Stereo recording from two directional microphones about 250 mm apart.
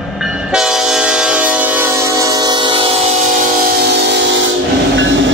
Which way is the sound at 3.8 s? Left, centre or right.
Right.